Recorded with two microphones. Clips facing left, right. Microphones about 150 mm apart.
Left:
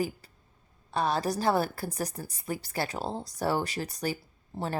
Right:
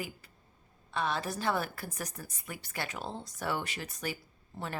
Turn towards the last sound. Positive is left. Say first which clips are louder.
# left 6 dB
turn(degrees=30)  # may be behind; listen again after turning